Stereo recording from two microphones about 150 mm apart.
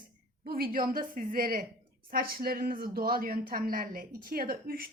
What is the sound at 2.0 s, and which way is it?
Speech, 85° right.